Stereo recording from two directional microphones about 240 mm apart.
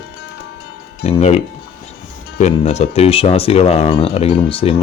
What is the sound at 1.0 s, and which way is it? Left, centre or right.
Speech, left.